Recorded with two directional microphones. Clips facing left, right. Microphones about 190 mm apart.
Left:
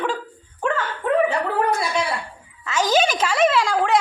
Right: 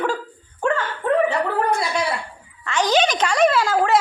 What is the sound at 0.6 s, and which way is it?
Dog, centre (ahead or behind).